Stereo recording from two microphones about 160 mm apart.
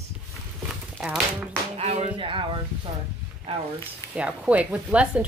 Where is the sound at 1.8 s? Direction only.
40° right (ahead or behind).